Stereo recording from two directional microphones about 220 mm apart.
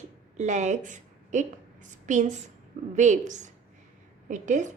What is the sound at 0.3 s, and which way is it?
Speech, 30° right (ahead or behind).